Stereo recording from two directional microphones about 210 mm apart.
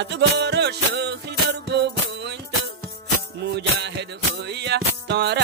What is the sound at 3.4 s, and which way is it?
Music, 55° right (ahead or behind).